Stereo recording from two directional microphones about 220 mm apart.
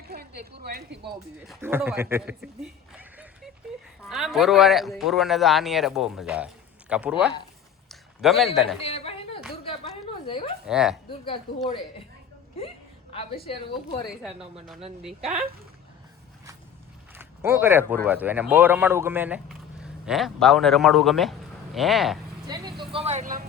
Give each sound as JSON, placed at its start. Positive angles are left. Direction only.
{"t": 0.1, "sound": "speech", "side_deg": -45}
{"t": 1.5, "sound": "speech", "side_deg": -10}
{"t": 7.9, "sound": "a sound", "side_deg": 0}
{"t": 8.8, "sound": "a sound", "side_deg": 25}
{"t": 10.7, "sound": "speech", "side_deg": -5}
{"t": 12.5, "sound": "hiccup", "side_deg": 25}
{"t": 13.8, "sound": "speech", "side_deg": 0}
{"t": 17.2, "sound": "a sound", "side_deg": -10}
{"t": 18.0, "sound": "speech", "side_deg": -10}
{"t": 22.4, "sound": "speech", "side_deg": -20}